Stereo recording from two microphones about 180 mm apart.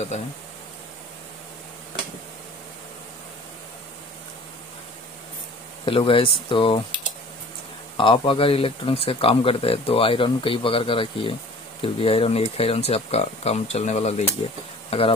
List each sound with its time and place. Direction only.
5.9 s speech: 30° left (ahead or behind)
8.0 s speech: 30° left (ahead or behind)